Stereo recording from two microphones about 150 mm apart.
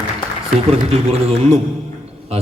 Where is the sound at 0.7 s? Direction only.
40° right (ahead or behind).